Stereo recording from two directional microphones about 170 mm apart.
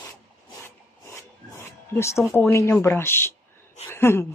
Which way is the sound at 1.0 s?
15° left (ahead or behind).